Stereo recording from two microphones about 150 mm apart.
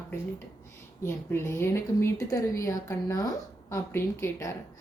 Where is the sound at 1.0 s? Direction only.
15° left (ahead or behind).